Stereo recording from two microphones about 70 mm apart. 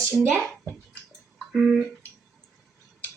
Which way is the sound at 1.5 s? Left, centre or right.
Centre.